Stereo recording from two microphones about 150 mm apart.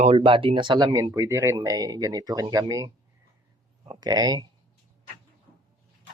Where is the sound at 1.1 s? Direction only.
20° right (ahead or behind).